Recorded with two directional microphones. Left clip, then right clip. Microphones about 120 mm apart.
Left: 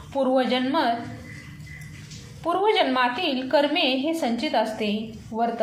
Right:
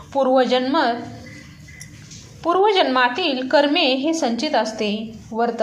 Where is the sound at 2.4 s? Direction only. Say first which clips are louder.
Right 5 dB; 30° right (ahead or behind).